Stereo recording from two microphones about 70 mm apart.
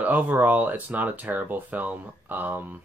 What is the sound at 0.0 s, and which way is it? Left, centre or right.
Speech, right.